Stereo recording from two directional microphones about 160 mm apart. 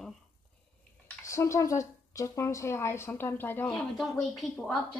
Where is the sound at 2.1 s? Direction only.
20° left (ahead or behind).